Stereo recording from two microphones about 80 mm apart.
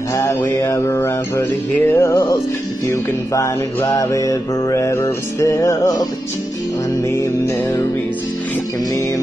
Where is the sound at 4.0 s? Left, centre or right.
Left.